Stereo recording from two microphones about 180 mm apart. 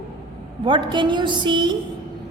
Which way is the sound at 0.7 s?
25° right (ahead or behind).